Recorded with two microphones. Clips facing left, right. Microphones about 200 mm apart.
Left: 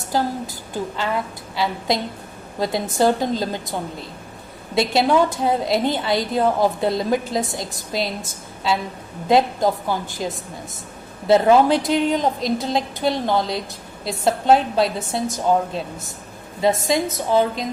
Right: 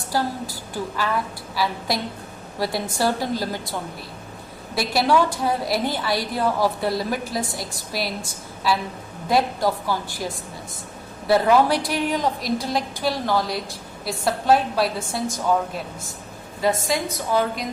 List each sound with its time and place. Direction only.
0.1 s a woman's voice: 20° left (ahead or behind)
9.3 s a woman's voice: 20° left (ahead or behind)
11.3 s a woman's voice: 20° left (ahead or behind)
16.8 s a woman's voice: 25° left (ahead or behind)